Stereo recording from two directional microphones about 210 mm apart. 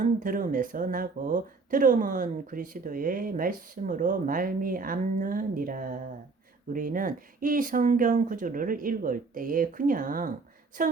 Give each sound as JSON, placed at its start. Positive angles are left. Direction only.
{"t": 0.0, "sound": "speech", "side_deg": -40}